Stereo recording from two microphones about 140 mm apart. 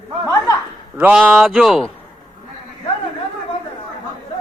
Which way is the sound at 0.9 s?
10° right (ahead or behind).